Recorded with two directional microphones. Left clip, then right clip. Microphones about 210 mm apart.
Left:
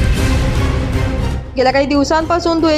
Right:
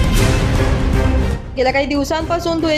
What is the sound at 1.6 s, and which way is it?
A woman's voice, 20° left (ahead or behind).